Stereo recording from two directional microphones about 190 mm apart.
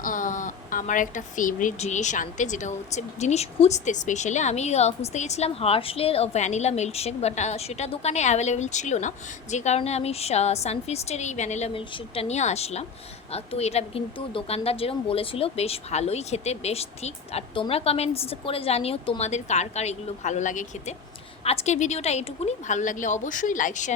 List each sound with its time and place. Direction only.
0.0 s speech: 45° left (ahead or behind)